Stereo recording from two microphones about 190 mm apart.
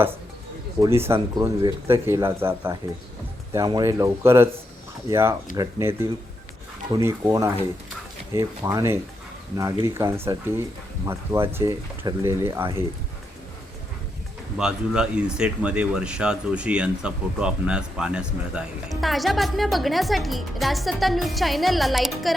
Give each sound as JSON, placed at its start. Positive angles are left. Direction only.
{"t": 0.8, "sound": "speech", "side_deg": -15}
{"t": 14.6, "sound": "speech", "side_deg": -5}